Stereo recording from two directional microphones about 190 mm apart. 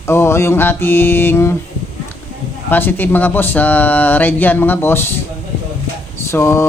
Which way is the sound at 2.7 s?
10° left (ahead or behind).